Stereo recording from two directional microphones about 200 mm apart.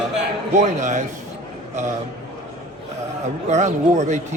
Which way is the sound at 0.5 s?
35° right (ahead or behind).